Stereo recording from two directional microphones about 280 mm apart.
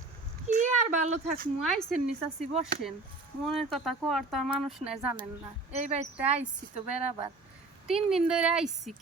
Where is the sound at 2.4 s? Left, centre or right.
Right.